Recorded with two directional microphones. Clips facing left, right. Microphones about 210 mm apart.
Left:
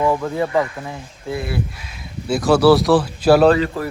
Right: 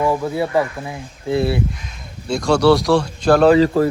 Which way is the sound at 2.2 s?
5° left (ahead or behind).